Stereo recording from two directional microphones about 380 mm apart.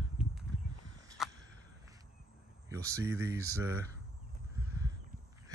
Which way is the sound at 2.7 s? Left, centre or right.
Centre.